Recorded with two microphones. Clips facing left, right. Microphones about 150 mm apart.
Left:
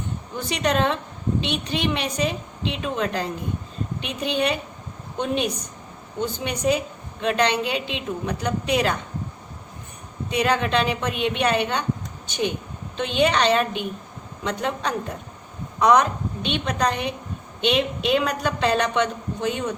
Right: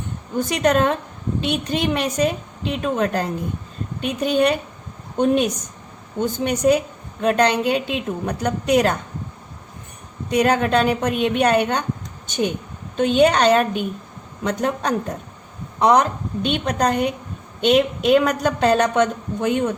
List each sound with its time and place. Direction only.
0.3 s a woman's voice: 45° right (ahead or behind)
10.2 s a woman's voice: 45° right (ahead or behind)
15.8 s a woman's voice: 30° right (ahead or behind)
16.4 s a woman's voice: 45° right (ahead or behind)